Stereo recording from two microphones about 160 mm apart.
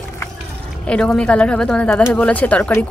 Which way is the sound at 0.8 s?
5° left (ahead or behind).